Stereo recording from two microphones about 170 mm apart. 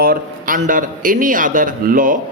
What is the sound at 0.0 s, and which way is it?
A man's voice, 55° right (ahead or behind).